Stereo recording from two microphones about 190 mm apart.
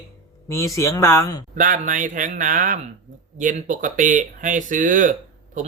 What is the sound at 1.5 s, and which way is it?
Speech, 45° right (ahead or behind).